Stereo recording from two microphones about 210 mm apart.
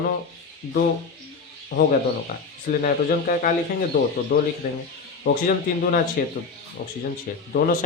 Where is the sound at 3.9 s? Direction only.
50° left (ahead or behind).